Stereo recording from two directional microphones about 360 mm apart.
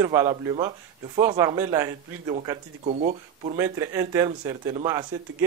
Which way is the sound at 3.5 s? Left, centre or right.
Centre.